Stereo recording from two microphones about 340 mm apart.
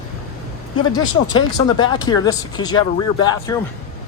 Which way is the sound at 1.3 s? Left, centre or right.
Centre.